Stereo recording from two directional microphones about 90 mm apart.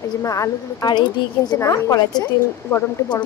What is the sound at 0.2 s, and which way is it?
Speech, 35° left (ahead or behind).